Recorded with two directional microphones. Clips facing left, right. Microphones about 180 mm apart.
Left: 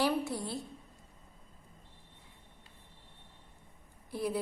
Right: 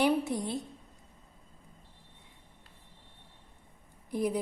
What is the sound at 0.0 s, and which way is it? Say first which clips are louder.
Speech: right 4 dB; 20° right (ahead or behind).